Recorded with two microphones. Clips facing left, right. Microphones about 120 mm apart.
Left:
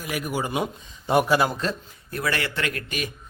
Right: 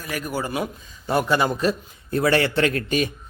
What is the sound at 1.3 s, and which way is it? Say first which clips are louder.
Speech: even; 5° left (ahead or behind).